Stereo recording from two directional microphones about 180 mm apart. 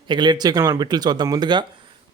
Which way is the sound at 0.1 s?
25° right (ahead or behind).